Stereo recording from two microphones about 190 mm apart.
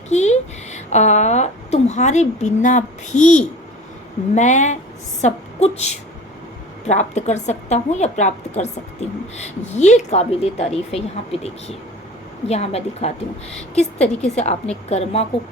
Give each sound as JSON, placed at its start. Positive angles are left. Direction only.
{"t": 0.1, "sound": "a woman's voice", "side_deg": 35}
{"t": 14.3, "sound": "a woman's voice", "side_deg": 35}